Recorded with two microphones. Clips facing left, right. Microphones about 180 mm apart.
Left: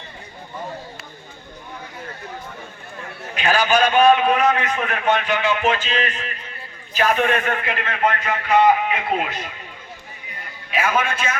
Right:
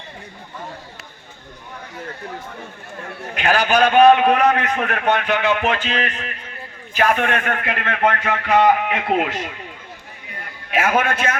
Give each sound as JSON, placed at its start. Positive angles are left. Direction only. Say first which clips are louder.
{"t": 3.3, "sound": "a man's voice", "louder": "right 1 dB", "side_deg": -60}
{"t": 10.7, "sound": "a man's voice", "louder": "right 3 dB", "side_deg": -45}
{"t": 11.0, "sound": "a man's voice", "louder": "right 3 dB", "side_deg": -60}